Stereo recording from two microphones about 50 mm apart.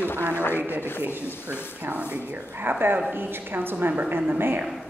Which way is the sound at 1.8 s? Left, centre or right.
Right.